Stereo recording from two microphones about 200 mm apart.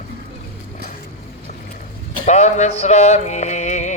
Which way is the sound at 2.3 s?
35° left (ahead or behind).